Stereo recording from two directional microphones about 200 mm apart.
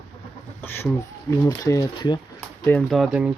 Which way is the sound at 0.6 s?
10° left (ahead or behind).